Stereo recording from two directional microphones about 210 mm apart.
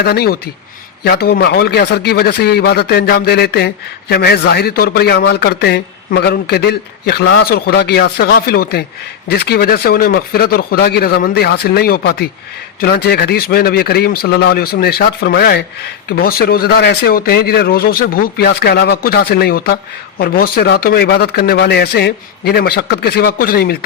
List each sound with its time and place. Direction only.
0.0 s a man's voice: 50° left (ahead or behind)